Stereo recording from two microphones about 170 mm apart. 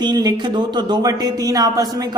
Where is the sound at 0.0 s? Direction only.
25° right (ahead or behind).